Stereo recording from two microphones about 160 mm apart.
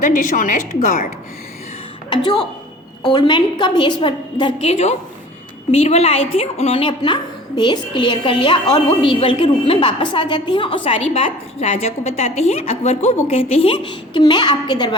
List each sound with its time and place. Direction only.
0.0 s a woman's voice: 55° left (ahead or behind)
2.0 s a woman's voice: 25° left (ahead or behind)